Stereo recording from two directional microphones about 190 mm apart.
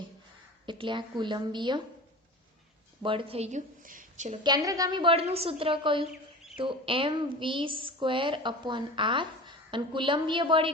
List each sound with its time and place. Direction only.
0.6 s a woman's voice: 25° right (ahead or behind)
3.0 s speech: 25° right (ahead or behind); by 4.4 s 40° right (ahead or behind)
4.4 s a woman's voice: 20° right (ahead or behind)
6.1 s rodents: 5° right (ahead or behind)
6.6 s a woman's voice: 25° right (ahead or behind)